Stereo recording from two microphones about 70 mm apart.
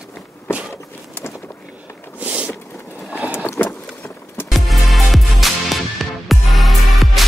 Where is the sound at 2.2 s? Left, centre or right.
Centre.